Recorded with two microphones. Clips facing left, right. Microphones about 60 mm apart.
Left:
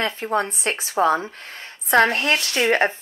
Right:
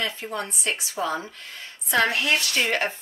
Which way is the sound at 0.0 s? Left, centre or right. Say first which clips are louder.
Left 7 dB; left.